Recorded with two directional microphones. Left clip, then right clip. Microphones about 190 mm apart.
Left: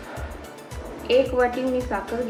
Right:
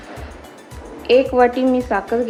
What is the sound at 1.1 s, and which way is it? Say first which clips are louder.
Speech: right 6 dB; 60° right (ahead or behind).